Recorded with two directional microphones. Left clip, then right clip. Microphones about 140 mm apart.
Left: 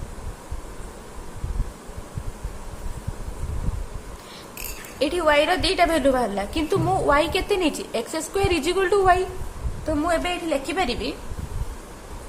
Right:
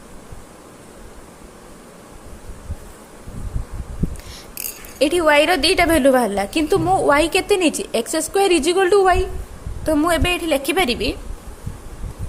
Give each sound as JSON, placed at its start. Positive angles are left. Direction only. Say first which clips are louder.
{"t": 4.9, "sound": "a woman's voice", "louder": "right 5 dB", "side_deg": -45}
{"t": 9.8, "sound": "a woman's voice", "louder": "right 5 dB", "side_deg": -55}